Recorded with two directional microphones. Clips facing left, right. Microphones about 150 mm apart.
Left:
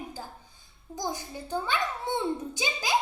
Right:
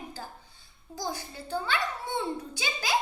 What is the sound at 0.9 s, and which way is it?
A woman's voice, 20° left (ahead or behind).